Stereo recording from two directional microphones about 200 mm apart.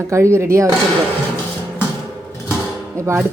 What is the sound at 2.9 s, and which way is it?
Speech, 15° right (ahead or behind).